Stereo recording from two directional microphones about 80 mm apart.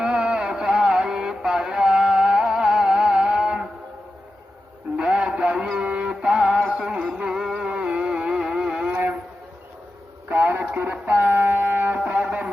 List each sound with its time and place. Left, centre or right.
0.0 s music: centre
4.9 s music: centre
6.7 s a sound: centre
10.2 s music: right